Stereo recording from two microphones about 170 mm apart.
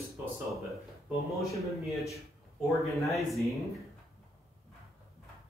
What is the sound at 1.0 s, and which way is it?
Speech, centre (ahead or behind).